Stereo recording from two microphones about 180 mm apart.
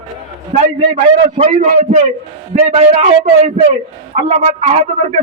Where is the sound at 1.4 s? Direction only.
35° right (ahead or behind).